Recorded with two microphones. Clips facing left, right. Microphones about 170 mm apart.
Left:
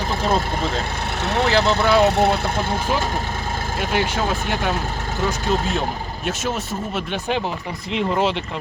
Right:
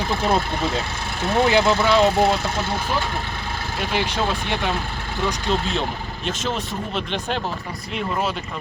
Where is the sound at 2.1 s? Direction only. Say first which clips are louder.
Left 1 dB; 60° left (ahead or behind).